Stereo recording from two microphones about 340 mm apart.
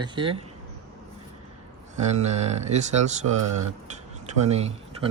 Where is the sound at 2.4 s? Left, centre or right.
Centre.